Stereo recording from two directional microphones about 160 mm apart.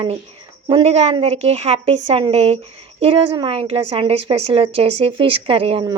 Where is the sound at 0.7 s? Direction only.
35° right (ahead or behind).